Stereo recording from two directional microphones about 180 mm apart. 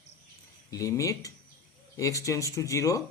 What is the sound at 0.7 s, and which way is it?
A man's voice, 20° left (ahead or behind).